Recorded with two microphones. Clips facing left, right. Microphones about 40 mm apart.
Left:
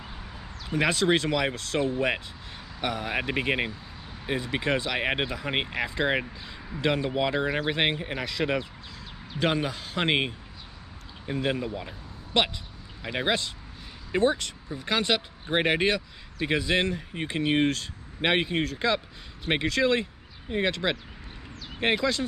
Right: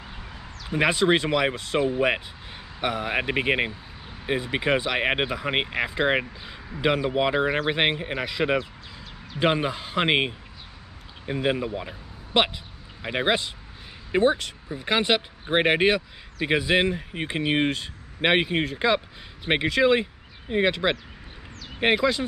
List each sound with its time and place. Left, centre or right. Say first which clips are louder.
0.7 s speech: right 3 dB; centre